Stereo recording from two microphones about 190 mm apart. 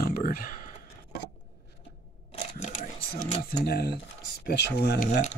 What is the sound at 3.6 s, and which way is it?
Speech, 60° left (ahead or behind).